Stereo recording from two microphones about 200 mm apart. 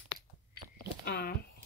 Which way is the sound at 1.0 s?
50° left (ahead or behind).